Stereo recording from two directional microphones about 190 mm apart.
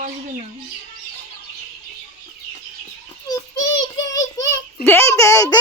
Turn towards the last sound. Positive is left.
turn(degrees=15)  # may be behind; listen again after turning